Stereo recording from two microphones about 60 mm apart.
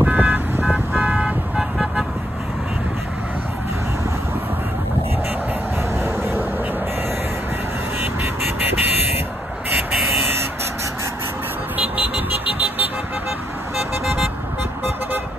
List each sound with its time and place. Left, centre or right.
0.0 s car alarm: right
1.0 s vehicle: centre
6.0 s vehicle: right
8.0 s vehicle: right
13.7 s vehicle: centre